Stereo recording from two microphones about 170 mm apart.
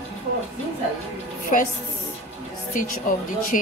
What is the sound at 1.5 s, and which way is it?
Speech, 50° left (ahead or behind).